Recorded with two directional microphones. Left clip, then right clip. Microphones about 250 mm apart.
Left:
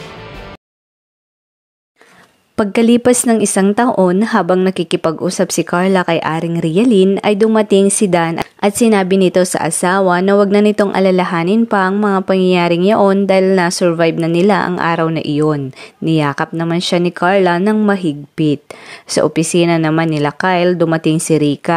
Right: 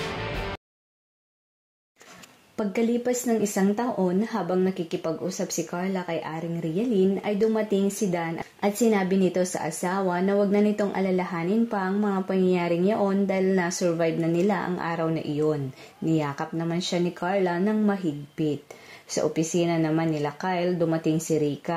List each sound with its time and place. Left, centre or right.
0.0 s music: centre
2.5 s speech: left